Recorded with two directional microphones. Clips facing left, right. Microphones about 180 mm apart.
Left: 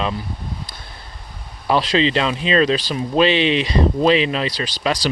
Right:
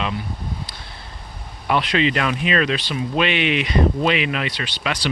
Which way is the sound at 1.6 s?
30° left (ahead or behind).